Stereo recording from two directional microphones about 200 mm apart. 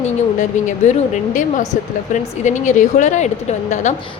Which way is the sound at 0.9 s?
35° left (ahead or behind).